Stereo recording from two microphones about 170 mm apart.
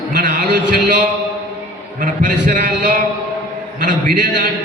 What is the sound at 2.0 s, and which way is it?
A man's voice, 50° right (ahead or behind).